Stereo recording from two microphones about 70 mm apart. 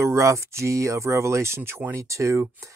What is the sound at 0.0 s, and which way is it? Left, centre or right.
Speech, right.